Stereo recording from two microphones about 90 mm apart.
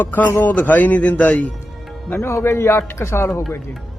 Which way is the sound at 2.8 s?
30° left (ahead or behind).